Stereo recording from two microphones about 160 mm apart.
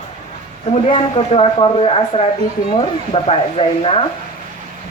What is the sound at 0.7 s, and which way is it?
Speech, 35° left (ahead or behind).